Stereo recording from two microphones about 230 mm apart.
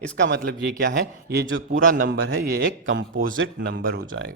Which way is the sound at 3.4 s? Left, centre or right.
Right.